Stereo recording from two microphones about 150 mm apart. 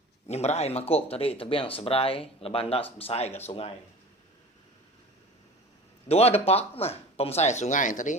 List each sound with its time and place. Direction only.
0.3 s speech: 45° left (ahead or behind)
6.1 s speech: 45° left (ahead or behind)